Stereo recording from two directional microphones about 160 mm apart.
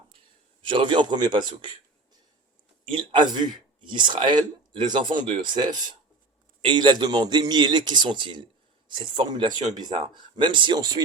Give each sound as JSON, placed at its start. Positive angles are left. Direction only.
{"t": 0.7, "sound": "speech", "side_deg": -30}
{"t": 2.8, "sound": "speech", "side_deg": -30}